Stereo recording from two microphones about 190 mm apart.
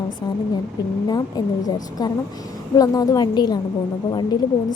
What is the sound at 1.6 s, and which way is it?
A woman's voice, 20° left (ahead or behind).